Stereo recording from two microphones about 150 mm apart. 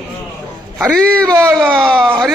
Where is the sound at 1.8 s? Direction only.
5° left (ahead or behind).